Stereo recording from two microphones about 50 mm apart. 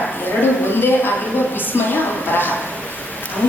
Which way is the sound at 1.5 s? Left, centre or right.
Left.